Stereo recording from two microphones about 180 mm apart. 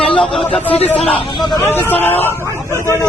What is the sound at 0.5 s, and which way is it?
Speech, 10° left (ahead or behind).